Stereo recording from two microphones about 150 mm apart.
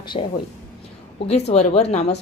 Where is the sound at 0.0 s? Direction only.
35° left (ahead or behind).